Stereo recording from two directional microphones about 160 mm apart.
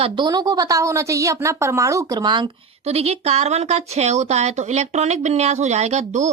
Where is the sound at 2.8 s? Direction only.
40° right (ahead or behind).